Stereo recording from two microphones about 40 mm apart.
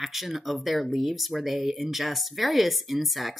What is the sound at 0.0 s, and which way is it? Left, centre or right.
Speech, centre.